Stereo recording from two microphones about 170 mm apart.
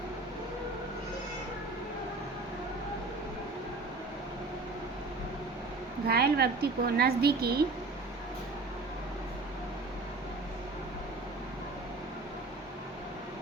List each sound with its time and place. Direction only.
6.1 s a woman's voice: 70° right (ahead or behind)